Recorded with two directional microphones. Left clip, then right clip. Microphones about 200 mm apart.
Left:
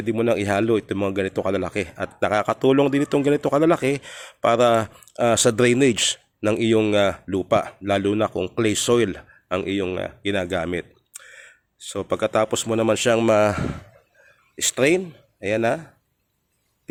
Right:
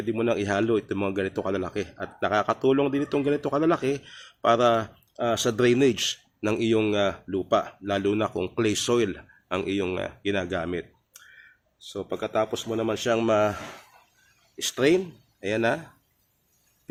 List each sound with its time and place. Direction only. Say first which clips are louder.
0.0 s a man's voice: left 4 dB; 30° left (ahead or behind)